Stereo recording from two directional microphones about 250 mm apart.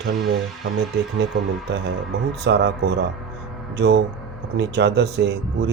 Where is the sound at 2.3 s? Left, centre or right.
Right.